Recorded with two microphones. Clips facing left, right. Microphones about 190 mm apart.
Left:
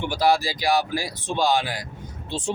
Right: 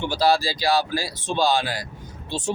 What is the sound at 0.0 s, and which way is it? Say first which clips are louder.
Speech: even; 15° left (ahead or behind).